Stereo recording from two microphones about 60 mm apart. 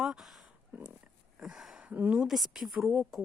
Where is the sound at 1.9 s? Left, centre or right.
Right.